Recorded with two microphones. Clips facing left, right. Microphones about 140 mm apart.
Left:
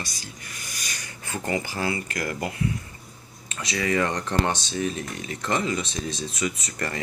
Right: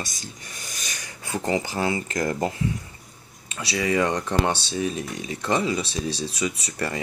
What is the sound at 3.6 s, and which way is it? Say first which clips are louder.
Speech: right 2 dB; 10° right (ahead or behind).